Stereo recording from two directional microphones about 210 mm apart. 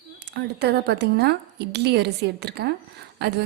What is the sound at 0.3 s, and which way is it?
A woman's voice, 50° right (ahead or behind).